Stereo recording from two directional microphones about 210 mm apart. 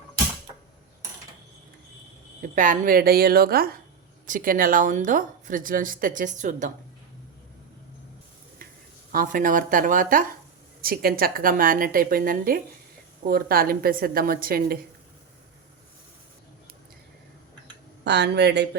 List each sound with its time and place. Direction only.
2.4 s a woman's voice: 40° right (ahead or behind)
9.1 s a woman's voice: 40° right (ahead or behind)
18.0 s a woman's voice: 55° right (ahead or behind)